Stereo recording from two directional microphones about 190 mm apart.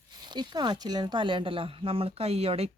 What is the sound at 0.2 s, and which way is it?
Speech, 25° right (ahead or behind).